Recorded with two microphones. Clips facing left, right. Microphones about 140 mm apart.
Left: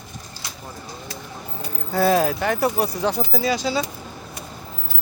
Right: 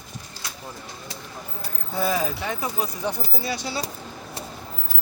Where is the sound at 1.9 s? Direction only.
70° left (ahead or behind); by 3.7 s 90° left.